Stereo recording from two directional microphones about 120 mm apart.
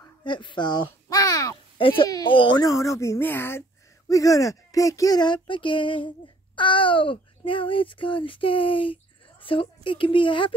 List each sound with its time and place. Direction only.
0.2 s speech: 40° left (ahead or behind)
1.0 s a sound: 30° left (ahead or behind)
1.8 s a woman's voice: 45° left (ahead or behind)